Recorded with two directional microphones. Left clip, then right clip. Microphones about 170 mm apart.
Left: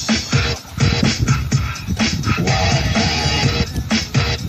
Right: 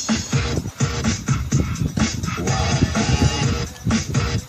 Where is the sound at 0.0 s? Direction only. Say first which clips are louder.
Left 5 dB; 40° left (ahead or behind).